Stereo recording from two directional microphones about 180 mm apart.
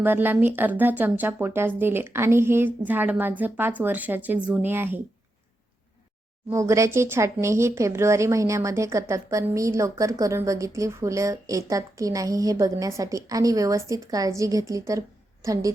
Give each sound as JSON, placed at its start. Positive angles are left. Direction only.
{"t": 0.0, "sound": "speech", "side_deg": -10}
{"t": 6.5, "sound": "speech", "side_deg": -15}